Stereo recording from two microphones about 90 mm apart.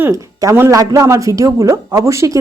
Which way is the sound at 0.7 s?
40° right (ahead or behind).